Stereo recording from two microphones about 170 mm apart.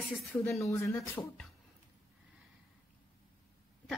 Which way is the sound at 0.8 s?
15° left (ahead or behind).